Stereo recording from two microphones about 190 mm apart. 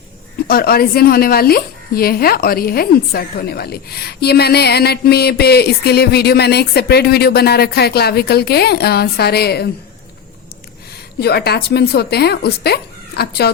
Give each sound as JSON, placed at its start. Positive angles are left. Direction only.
{"t": 0.4, "sound": "speech", "side_deg": 50}
{"t": 11.2, "sound": "speech", "side_deg": 60}